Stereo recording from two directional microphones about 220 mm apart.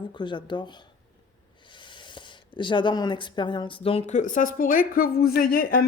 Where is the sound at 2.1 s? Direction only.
20° left (ahead or behind).